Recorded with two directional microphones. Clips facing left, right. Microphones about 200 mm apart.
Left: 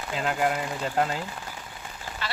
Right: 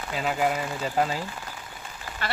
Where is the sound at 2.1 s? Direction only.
25° left (ahead or behind).